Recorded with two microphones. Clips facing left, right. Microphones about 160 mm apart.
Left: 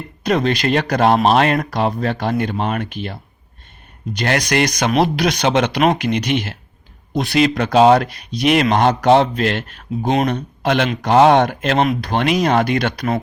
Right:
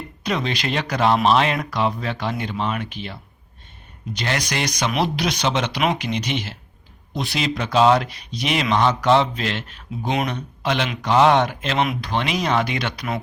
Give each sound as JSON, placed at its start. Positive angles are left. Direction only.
{"t": 0.3, "sound": "speech", "side_deg": 45}
{"t": 4.9, "sound": "speech", "side_deg": 50}